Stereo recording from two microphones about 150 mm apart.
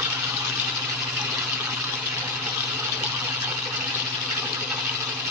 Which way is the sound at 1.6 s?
10° right (ahead or behind).